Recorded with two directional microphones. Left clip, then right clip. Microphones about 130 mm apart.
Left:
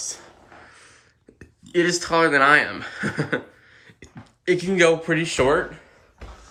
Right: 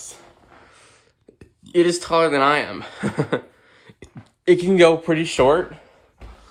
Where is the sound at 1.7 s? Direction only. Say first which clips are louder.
Right 3 dB; 15° right (ahead or behind).